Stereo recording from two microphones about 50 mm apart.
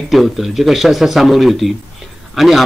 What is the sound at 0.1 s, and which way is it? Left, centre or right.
A man's voice, centre.